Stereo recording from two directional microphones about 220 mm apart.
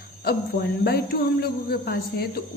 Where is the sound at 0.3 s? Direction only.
45° left (ahead or behind).